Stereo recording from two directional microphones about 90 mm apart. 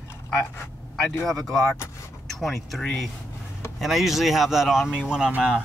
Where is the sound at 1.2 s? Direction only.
5° left (ahead or behind).